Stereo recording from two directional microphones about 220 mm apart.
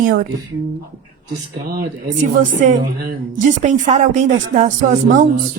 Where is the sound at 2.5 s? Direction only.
40° right (ahead or behind).